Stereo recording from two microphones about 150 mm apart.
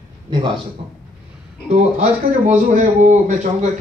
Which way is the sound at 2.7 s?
55° right (ahead or behind).